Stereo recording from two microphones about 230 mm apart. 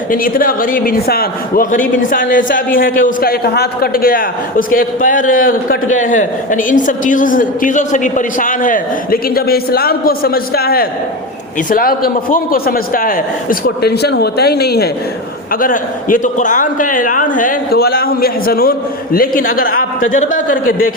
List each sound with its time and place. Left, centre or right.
0.1 s a man's voice: left